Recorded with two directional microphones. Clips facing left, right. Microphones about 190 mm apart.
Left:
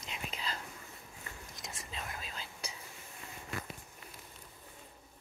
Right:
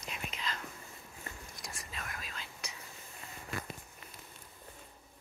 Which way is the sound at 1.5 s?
25° left (ahead or behind).